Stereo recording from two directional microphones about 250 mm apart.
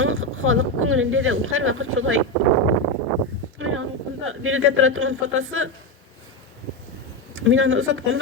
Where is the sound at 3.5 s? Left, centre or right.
Right.